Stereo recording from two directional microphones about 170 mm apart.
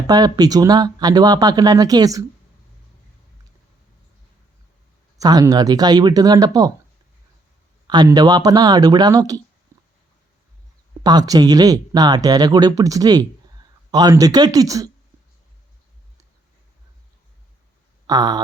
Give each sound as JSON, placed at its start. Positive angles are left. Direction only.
{"t": 0.1, "sound": "speech", "side_deg": -20}
{"t": 5.1, "sound": "speech", "side_deg": -20}
{"t": 7.9, "sound": "speech", "side_deg": -25}
{"t": 9.7, "sound": "a sound", "side_deg": -15}
{"t": 11.0, "sound": "speech", "side_deg": -25}
{"t": 18.0, "sound": "a sound", "side_deg": -25}